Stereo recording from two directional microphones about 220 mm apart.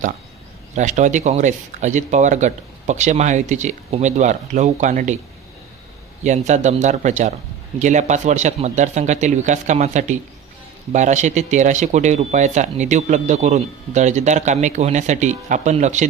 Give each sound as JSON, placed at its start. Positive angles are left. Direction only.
{"t": 0.8, "sound": "speech", "side_deg": -35}
{"t": 6.2, "sound": "speech", "side_deg": -30}